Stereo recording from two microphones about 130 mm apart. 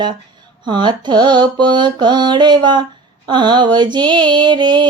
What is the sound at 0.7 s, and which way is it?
Mantra, 35° right (ahead or behind).